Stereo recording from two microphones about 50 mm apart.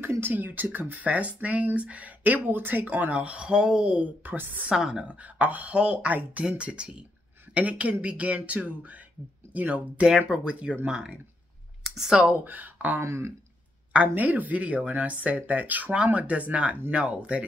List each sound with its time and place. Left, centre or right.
0.0 s a sound: right
0.3 s speech: right
3.2 s speech: right
4.2 s speech: right
4.6 s a woman's voice: centre
5.0 s speech: right
10.0 s speech: centre
12.1 s a woman's voice: centre
12.4 s speech: right
13.0 s speech: right
14.0 s speech: right